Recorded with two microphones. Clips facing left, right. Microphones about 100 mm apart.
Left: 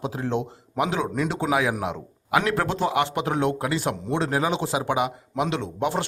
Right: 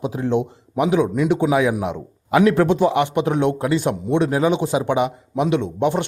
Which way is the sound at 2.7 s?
25° right (ahead or behind).